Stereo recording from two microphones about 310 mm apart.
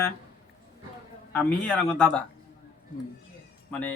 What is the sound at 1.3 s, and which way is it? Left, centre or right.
Speech, centre.